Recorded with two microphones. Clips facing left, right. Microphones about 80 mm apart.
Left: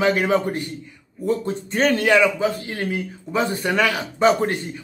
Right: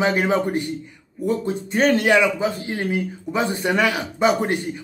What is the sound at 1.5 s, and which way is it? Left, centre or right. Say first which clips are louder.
Speech: right 1 dB; centre.